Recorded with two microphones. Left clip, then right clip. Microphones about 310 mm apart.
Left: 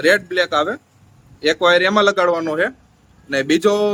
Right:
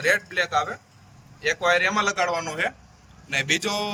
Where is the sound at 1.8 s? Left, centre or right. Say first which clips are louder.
Left 8 dB; left.